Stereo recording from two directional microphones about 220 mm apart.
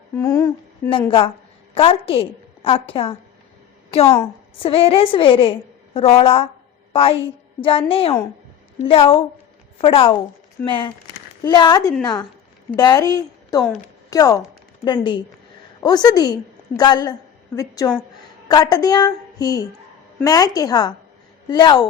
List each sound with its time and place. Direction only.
0.2 s a woman's voice: 15° left (ahead or behind)
0.9 s a woman's voice: 25° left (ahead or behind)